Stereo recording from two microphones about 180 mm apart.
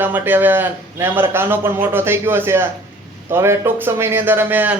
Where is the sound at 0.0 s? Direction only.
10° right (ahead or behind).